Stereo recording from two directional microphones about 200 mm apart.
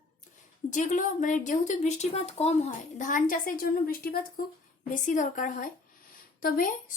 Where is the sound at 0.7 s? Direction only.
40° left (ahead or behind).